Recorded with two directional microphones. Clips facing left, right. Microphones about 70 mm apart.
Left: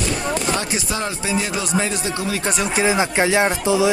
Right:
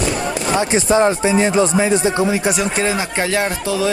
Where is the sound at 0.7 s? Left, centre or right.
Right.